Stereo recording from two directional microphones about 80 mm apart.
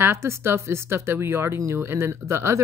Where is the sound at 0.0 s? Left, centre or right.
Right.